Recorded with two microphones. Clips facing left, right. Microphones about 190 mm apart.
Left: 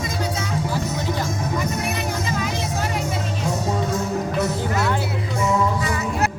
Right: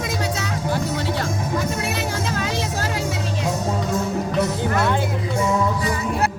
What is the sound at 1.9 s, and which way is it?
Music, 90° right.